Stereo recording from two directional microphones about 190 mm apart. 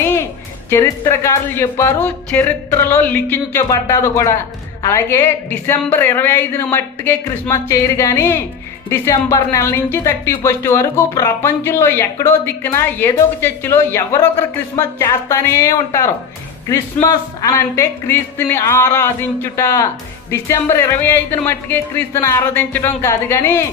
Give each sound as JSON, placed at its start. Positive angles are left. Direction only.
{"t": 0.7, "sound": "speech", "side_deg": 15}